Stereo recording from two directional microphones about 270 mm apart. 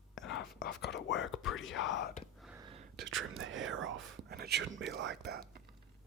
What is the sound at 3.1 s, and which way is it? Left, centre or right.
Speech, right.